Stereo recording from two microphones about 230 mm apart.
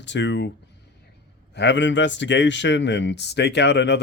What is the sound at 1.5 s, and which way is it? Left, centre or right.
A man's voice, left.